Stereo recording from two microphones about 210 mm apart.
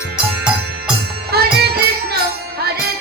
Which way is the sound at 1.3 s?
50° right (ahead or behind).